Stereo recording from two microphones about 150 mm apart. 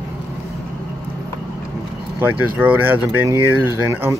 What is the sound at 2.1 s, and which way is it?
Speech, 10° right (ahead or behind).